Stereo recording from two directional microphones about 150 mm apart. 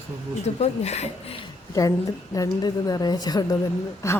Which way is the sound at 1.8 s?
20° left (ahead or behind).